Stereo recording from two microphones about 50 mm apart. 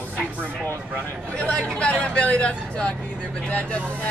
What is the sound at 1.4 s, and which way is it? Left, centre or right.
Speech, centre.